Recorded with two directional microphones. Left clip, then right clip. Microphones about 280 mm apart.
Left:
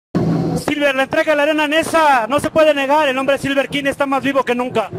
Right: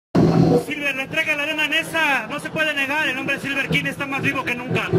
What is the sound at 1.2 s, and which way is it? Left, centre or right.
Speech, left.